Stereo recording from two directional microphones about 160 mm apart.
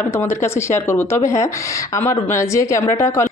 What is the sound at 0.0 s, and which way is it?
Speech, 15° left (ahead or behind).